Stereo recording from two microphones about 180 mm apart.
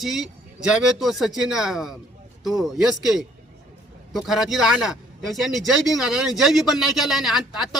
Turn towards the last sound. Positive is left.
turn(degrees=0)  # may be behind; listen again after turning